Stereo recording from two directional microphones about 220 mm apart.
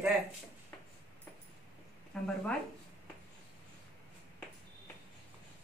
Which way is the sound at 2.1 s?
5° left (ahead or behind).